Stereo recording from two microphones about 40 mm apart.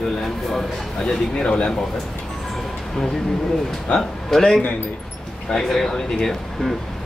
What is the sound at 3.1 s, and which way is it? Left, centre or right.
Speech, centre.